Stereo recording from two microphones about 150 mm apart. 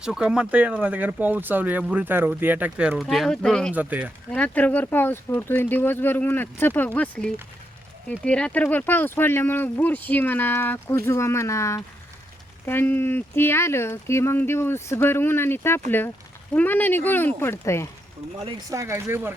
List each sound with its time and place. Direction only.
0.0 s speech: 5° right (ahead or behind)
3.8 s speech: 10° right (ahead or behind)
4.3 s speech: 10° left (ahead or behind)
18.7 s speech: 20° right (ahead or behind)